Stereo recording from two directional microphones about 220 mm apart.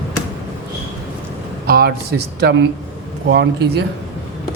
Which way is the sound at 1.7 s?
45° right (ahead or behind).